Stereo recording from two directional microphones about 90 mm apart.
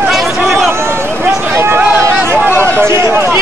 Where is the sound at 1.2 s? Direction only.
25° right (ahead or behind).